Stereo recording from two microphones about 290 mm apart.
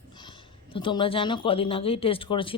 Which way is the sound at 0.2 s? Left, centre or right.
Centre.